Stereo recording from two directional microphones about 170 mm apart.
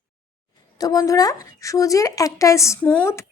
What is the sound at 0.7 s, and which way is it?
A woman's voice, 20° left (ahead or behind).